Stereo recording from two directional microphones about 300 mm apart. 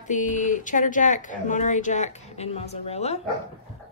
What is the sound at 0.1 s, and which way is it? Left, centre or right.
Speech, left.